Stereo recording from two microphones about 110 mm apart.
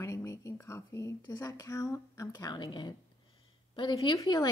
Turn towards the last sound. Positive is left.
turn(degrees=35)  # may be behind; listen again after turning